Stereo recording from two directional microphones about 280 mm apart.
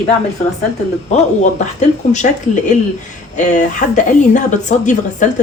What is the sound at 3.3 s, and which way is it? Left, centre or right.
A woman's voice, left.